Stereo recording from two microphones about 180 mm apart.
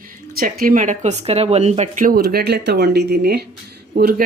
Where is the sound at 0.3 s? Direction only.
50° right (ahead or behind).